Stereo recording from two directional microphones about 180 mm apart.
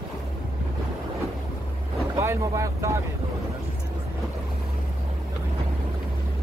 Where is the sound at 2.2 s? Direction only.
15° right (ahead or behind).